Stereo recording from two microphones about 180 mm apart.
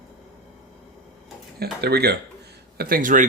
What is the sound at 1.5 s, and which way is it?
Speech, 60° right (ahead or behind).